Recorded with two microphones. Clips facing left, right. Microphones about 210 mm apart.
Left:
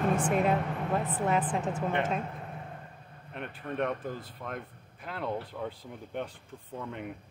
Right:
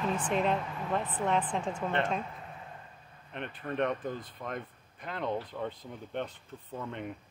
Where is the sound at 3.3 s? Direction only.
Centre (ahead or behind).